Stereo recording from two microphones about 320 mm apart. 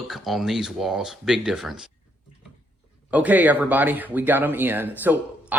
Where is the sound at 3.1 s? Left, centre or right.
Centre.